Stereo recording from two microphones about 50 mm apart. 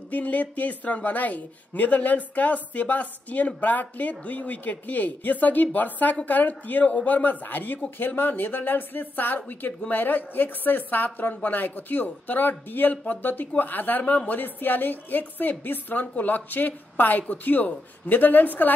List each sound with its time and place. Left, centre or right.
0.1 s a woman's voice: left